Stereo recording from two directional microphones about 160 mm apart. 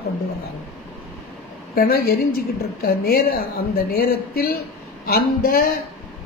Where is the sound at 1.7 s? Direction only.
70° left (ahead or behind).